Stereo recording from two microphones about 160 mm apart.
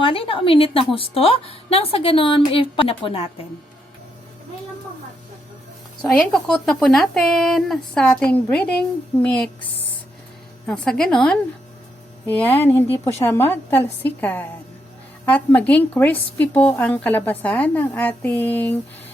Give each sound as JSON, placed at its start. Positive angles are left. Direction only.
{"t": 0.0, "sound": "a woman's voice", "side_deg": 35}
{"t": 6.0, "sound": "a woman's voice", "side_deg": 5}
{"t": 10.7, "sound": "a woman's voice", "side_deg": 5}